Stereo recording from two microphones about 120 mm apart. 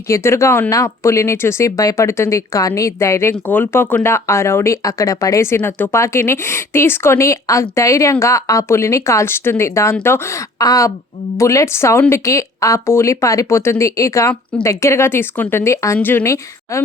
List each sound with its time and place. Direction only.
0.1 s speech: 25° left (ahead or behind)